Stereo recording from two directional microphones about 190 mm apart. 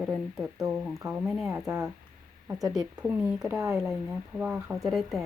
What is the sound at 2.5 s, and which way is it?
A woman's voice, 20° right (ahead or behind).